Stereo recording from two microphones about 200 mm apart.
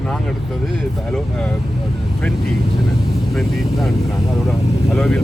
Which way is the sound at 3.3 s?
Centre (ahead or behind).